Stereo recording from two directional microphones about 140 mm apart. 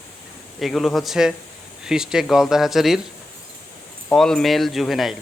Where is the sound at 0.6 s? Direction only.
Centre (ahead or behind).